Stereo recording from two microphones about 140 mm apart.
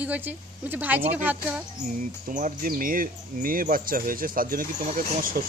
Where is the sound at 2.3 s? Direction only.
65° right (ahead or behind).